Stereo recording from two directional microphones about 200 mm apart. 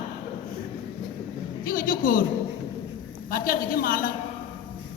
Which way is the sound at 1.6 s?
45° left (ahead or behind).